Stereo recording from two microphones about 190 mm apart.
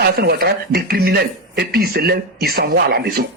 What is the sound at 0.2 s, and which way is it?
Speech, 55° right (ahead or behind).